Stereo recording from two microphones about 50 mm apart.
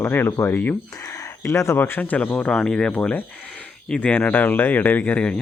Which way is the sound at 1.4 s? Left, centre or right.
Left.